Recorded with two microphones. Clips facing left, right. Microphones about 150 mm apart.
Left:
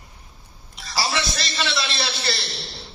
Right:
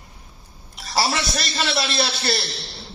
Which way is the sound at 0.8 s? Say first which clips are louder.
Right 3 dB; 55° right (ahead or behind).